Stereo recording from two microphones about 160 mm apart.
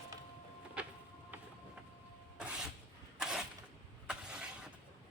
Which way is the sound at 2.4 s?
5° right (ahead or behind).